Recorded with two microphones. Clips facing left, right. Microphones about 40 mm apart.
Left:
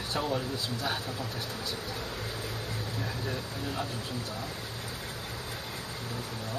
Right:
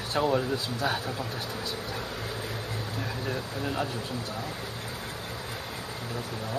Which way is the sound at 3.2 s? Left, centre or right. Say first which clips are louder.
Right 3 dB; right.